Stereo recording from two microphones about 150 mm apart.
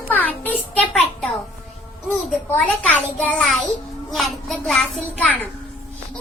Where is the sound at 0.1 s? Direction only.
10° left (ahead or behind).